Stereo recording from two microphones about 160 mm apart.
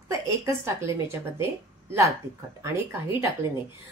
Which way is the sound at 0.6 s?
15° right (ahead or behind).